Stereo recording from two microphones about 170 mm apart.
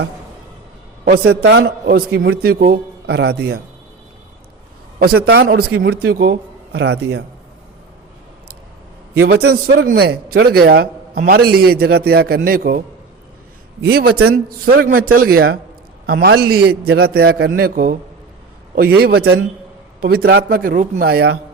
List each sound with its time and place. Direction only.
1.0 s a man's voice: 70° right (ahead or behind)
4.9 s a man's voice: 65° right (ahead or behind)
6.7 s a man's voice: 90° right
9.3 s a man's voice: 65° right (ahead or behind)
13.8 s a man's voice: 65° right (ahead or behind)
18.9 s a man's voice: 65° right (ahead or behind)